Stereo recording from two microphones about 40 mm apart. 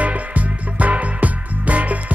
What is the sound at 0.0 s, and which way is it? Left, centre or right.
Music, right.